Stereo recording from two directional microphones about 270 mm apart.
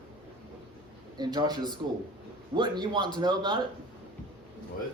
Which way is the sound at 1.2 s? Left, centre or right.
Centre.